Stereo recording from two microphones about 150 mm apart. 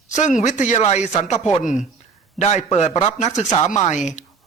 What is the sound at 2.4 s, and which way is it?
A man's voice, 50° left (ahead or behind).